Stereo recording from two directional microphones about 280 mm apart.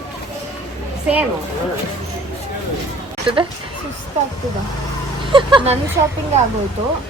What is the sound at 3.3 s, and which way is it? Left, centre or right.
Speech, centre.